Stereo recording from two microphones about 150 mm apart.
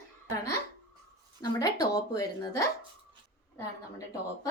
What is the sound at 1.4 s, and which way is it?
Speech, 25° left (ahead or behind).